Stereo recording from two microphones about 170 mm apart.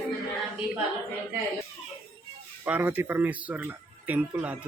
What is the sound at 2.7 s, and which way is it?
Speech, 10° right (ahead or behind).